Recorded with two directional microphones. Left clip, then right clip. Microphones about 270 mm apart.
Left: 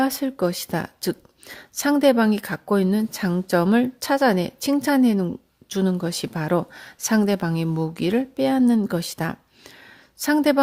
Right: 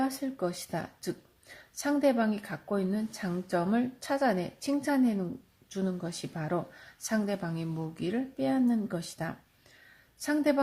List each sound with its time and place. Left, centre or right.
0.0 s a woman's voice: left